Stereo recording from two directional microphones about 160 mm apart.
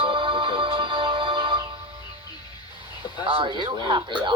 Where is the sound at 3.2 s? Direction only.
35° right (ahead or behind).